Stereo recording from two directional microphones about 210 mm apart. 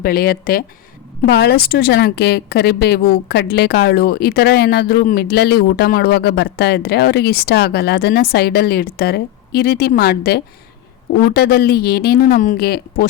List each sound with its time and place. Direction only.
0.0 s a woman's voice: 45° left (ahead or behind)